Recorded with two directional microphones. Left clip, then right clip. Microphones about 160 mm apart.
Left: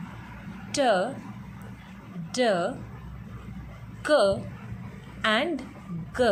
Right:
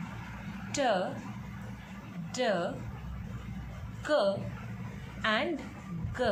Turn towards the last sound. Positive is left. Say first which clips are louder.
# left 7 dB
turn(degrees=35)  # may be behind; listen again after turning